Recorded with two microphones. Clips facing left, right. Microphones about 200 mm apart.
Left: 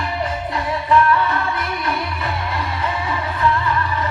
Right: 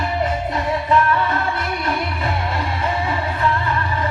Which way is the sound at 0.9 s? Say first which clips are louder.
Left 3 dB; 25° right (ahead or behind).